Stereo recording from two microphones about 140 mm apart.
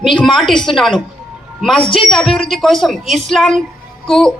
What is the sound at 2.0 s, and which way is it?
A woman's voice, centre (ahead or behind).